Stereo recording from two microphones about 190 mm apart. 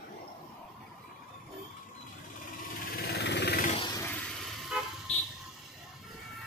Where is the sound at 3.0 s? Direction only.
60° left (ahead or behind).